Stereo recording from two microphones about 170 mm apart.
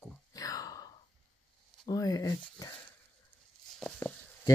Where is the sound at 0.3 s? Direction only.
20° left (ahead or behind).